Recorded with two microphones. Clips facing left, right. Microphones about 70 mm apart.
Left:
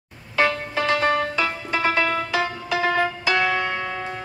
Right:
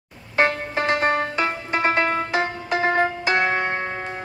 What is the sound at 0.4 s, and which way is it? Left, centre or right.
Music, right.